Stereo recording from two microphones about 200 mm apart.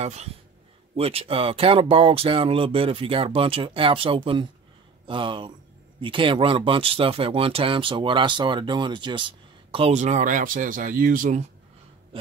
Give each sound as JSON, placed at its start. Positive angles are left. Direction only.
{"t": 0.0, "sound": "speech", "side_deg": -35}